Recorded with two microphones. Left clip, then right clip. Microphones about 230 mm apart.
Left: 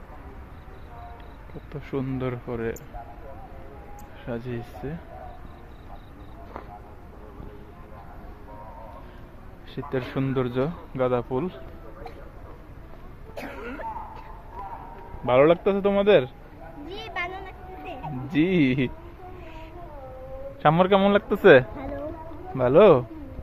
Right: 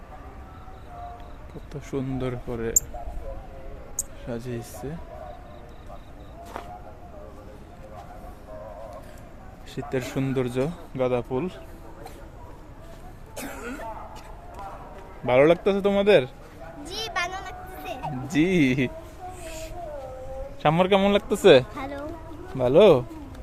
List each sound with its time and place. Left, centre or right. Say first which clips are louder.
1.7 s a man's voice: even; centre
4.3 s a man's voice: left 3 dB; centre
9.7 s a man's voice: even; centre
13.3 s music: even; right
15.3 s a man's voice: even; centre
16.9 s music: right 3 dB; centre
20.6 s a man's voice: left 1 dB; centre